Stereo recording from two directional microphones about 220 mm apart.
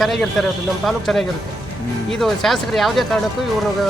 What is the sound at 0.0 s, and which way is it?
Speech, centre (ahead or behind).